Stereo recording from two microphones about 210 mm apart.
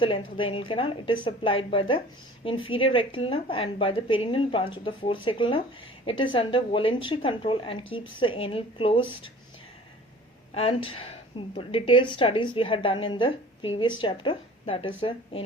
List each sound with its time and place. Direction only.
0.0 s a woman's voice: 25° left (ahead or behind)
10.5 s a woman's voice: 25° left (ahead or behind)